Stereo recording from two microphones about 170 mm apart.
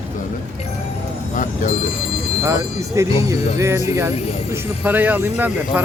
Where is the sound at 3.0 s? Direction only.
15° right (ahead or behind).